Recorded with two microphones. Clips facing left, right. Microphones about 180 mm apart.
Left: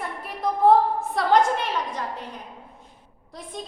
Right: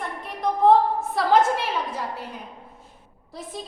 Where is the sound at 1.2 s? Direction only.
5° right (ahead or behind).